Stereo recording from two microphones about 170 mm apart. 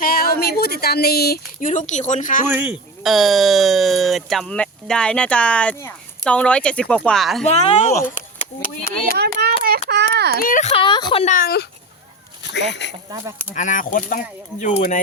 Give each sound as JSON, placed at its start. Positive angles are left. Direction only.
{"t": 0.0, "sound": "a sound", "side_deg": 60}
{"t": 0.6, "sound": "speech", "side_deg": 65}
{"t": 2.5, "sound": "speech", "side_deg": -10}
{"t": 7.4, "sound": "speech", "side_deg": 40}
{"t": 9.1, "sound": "hands", "side_deg": -70}
{"t": 9.6, "sound": "a sound", "side_deg": -70}
{"t": 10.3, "sound": "speech", "side_deg": 55}
{"t": 11.3, "sound": "speech", "side_deg": 60}
{"t": 12.4, "sound": "speech", "side_deg": 90}
{"t": 13.1, "sound": "speech", "side_deg": -20}
{"t": 13.5, "sound": "speech", "side_deg": 50}